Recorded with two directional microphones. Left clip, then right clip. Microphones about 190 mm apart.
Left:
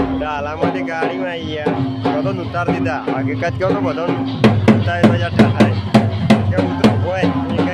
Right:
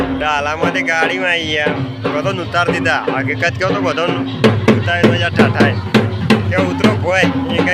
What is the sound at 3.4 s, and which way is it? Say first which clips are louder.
Speech: right 3 dB; 20° left (ahead or behind).